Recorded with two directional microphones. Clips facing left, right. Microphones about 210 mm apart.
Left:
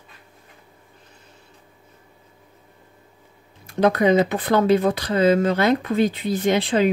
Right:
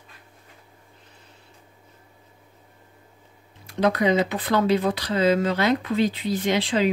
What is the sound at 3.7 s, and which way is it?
A woman's voice, 50° left (ahead or behind).